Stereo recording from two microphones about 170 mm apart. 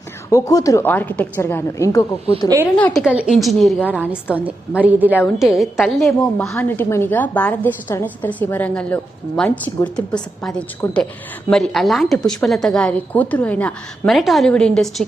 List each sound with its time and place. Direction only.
0.3 s a woman's voice: 20° left (ahead or behind)
2.7 s a woman's voice: 5° left (ahead or behind)
3.0 s a woman's voice: 5° right (ahead or behind)
4.8 s a woman's voice: 10° right (ahead or behind)